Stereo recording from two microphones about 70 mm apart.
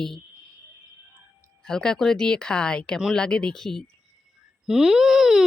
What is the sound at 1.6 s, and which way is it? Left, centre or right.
Speech, centre.